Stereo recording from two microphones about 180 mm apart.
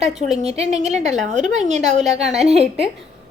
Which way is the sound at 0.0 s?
40° right (ahead or behind).